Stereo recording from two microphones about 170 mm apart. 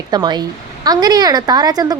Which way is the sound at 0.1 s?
25° right (ahead or behind).